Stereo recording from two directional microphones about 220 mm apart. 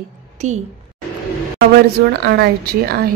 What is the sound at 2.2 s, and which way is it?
Speech, 45° right (ahead or behind).